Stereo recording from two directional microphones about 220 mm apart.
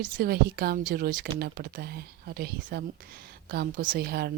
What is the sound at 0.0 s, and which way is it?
Speech, 45° right (ahead or behind).